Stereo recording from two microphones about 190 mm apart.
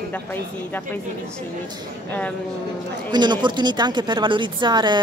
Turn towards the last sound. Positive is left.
turn(degrees=-25)  # may be behind; listen again after turning